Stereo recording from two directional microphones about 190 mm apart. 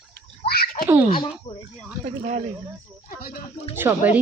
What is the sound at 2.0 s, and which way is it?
Speech, 40° right (ahead or behind).